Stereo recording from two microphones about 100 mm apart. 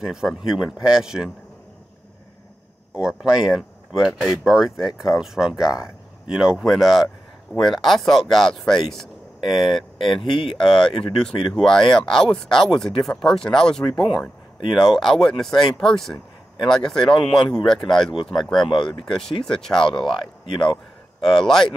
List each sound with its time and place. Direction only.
0.0 s speech: 5° right (ahead or behind)
2.9 s speech: 10° right (ahead or behind)